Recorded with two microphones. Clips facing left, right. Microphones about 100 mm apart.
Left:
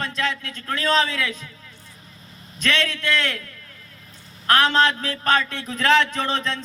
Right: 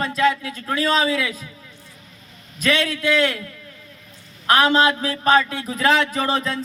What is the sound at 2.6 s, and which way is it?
Speech, 10° right (ahead or behind).